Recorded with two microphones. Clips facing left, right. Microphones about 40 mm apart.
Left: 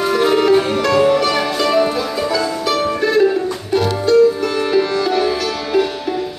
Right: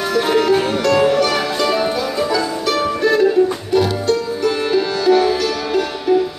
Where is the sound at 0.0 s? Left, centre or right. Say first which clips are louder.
Left 2 dB; centre.